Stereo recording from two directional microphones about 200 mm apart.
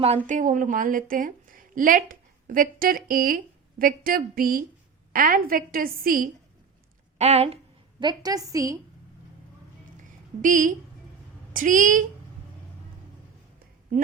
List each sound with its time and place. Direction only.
0.3 s a woman's voice: 40° right (ahead or behind)
7.2 s a woman's voice: 30° right (ahead or behind); by 8.8 s 15° right (ahead or behind)
10.0 s a sound: 40° right (ahead or behind)
11.5 s a woman's voice: 40° right (ahead or behind)